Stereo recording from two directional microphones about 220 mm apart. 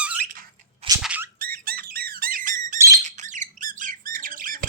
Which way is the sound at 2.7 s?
15° right (ahead or behind).